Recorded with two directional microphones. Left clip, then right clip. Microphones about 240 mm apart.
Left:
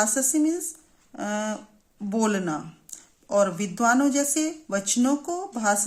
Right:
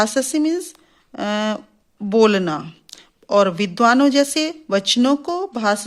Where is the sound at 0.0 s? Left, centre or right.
Right.